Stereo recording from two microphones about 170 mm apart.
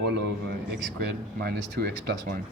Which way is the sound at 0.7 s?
65° right (ahead or behind).